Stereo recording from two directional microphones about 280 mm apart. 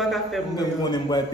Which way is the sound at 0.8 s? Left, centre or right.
Centre.